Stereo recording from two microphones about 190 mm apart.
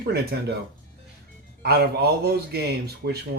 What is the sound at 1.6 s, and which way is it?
Speech, 60° right (ahead or behind).